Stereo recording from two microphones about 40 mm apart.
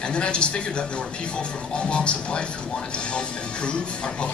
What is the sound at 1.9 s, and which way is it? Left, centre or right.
Speech, left.